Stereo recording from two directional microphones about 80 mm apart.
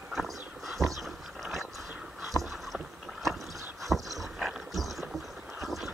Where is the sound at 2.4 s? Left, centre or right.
Centre.